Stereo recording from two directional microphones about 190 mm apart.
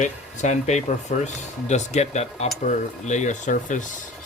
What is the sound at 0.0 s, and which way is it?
Speech, 40° left (ahead or behind).